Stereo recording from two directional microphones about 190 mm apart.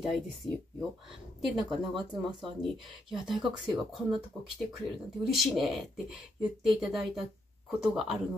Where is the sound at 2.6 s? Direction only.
Centre (ahead or behind).